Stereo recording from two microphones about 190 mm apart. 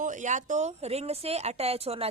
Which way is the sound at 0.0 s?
40° right (ahead or behind).